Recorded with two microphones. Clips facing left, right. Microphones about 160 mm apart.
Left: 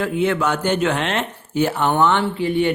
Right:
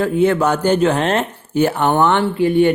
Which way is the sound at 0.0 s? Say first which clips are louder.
Right 5 dB; 40° right (ahead or behind).